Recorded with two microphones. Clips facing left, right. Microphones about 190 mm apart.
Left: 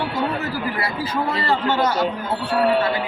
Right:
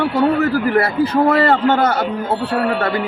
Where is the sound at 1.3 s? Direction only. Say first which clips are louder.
Right 8 dB; 55° right (ahead or behind).